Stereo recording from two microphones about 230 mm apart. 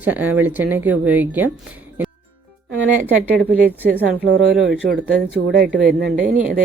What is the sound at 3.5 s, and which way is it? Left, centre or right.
Speech, right.